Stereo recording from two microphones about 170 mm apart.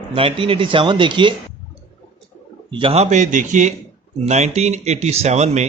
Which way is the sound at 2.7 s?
30° right (ahead or behind).